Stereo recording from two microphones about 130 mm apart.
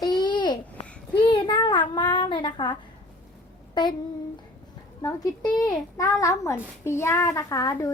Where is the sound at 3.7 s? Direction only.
35° left (ahead or behind).